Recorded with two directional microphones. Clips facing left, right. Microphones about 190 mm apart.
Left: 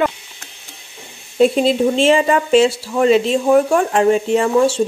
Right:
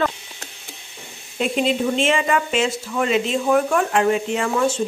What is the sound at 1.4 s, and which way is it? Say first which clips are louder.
Speech: left 7 dB; 35° left (ahead or behind).